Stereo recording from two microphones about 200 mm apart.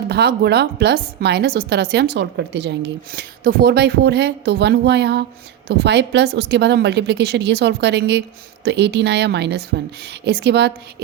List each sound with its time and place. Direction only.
0.1 s a woman's voice: 55° right (ahead or behind)